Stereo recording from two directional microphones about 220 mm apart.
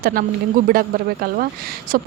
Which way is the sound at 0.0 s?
40° right (ahead or behind).